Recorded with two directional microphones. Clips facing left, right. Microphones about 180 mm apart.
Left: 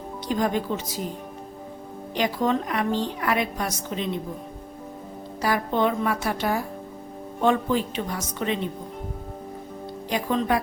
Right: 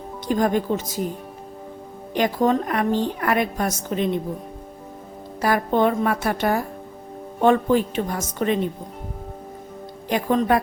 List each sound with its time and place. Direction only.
0.3 s a woman's voice: 50° right (ahead or behind)
2.1 s a woman's voice: 50° right (ahead or behind)
5.4 s a woman's voice: 55° right (ahead or behind)
10.1 s a woman's voice: 55° right (ahead or behind)